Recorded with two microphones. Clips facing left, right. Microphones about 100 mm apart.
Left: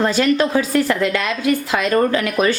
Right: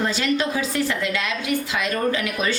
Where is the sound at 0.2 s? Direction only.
50° left (ahead or behind).